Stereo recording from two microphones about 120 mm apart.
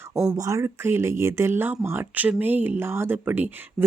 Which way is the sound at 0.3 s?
25° right (ahead or behind).